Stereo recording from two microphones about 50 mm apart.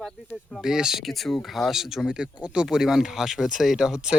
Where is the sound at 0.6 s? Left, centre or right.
Centre.